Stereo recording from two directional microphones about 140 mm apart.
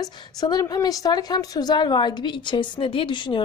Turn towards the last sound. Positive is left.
turn(degrees=35)  # may be behind; listen again after turning